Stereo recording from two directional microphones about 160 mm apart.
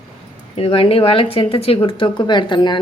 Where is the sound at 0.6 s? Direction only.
35° left (ahead or behind).